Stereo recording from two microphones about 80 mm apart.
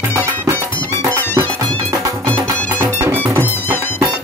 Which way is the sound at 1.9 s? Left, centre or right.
Right.